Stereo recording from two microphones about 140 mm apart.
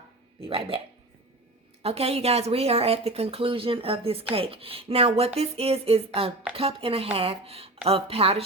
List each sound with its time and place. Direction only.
0.4 s speech: 40° right (ahead or behind)
1.8 s speech: 45° right (ahead or behind)